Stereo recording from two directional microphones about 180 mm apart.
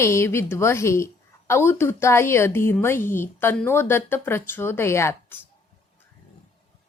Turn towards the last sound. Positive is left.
turn(degrees=15)  # may be behind; listen again after turning